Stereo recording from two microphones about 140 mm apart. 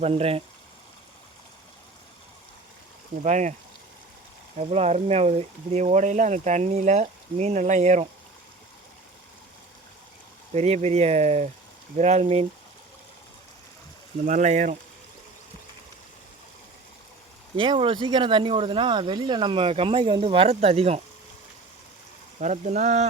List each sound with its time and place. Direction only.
0.0 s speech: 45° right (ahead or behind)
3.2 s speech: 60° right (ahead or behind)
4.5 s speech: 50° right (ahead or behind)
10.5 s speech: 55° right (ahead or behind)
14.3 s speech: 60° right (ahead or behind)
17.6 s speech: 35° right (ahead or behind)
22.4 s speech: 55° right (ahead or behind)